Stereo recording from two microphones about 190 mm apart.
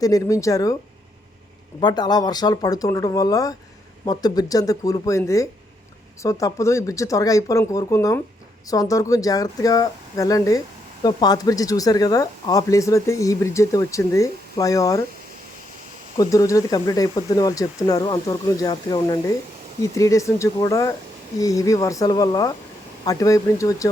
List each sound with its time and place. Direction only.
0.0 s speech: 15° left (ahead or behind)
1.8 s speech: 20° left (ahead or behind)
16.1 s speech: 20° left (ahead or behind)